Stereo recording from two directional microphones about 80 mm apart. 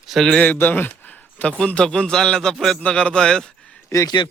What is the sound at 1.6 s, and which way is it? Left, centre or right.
A man's voice, centre.